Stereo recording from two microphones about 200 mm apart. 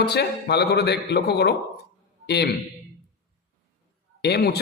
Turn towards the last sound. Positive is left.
turn(degrees=55)  # may be behind; listen again after turning